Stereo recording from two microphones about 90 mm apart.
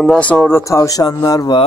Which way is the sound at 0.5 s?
35° left (ahead or behind).